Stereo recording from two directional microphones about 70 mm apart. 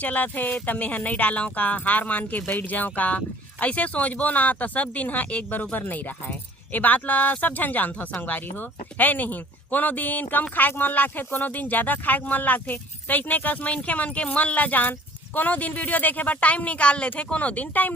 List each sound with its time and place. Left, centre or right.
0.0 s speech: left